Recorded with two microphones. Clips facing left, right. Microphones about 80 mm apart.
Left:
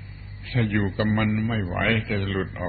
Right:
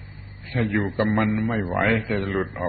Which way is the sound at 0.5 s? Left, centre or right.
Centre.